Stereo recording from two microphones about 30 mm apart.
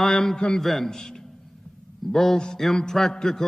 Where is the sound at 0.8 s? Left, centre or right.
Centre.